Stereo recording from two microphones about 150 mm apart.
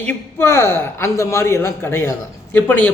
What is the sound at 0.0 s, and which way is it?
A man's voice, 10° left (ahead or behind).